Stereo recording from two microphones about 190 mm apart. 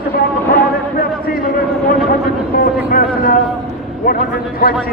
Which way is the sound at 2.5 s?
50° left (ahead or behind).